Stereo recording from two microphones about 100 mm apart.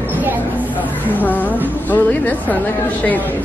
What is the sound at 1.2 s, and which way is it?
A woman's voice, 15° left (ahead or behind).